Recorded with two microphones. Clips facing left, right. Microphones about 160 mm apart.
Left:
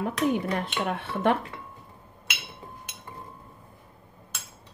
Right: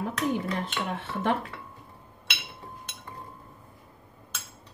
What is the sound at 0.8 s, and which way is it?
Dishes, 60° left (ahead or behind).